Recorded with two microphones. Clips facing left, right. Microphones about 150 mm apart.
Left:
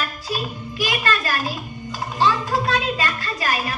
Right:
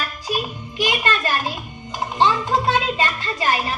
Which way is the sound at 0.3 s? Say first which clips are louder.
Right 5 dB; 20° right (ahead or behind).